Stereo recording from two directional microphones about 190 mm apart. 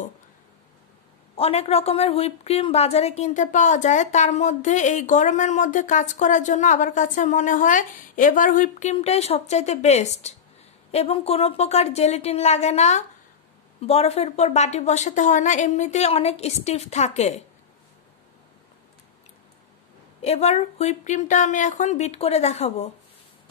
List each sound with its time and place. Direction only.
1.3 s a woman's voice: 30° left (ahead or behind)
20.2 s a woman's voice: 35° left (ahead or behind)